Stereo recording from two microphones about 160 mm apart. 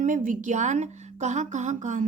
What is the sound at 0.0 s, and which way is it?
A woman's voice, 55° right (ahead or behind).